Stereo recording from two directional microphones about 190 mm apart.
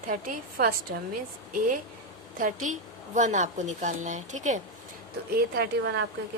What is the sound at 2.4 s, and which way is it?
A woman's voice, 40° right (ahead or behind).